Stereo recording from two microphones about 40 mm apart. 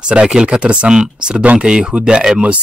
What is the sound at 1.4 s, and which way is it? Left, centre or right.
Speech, right.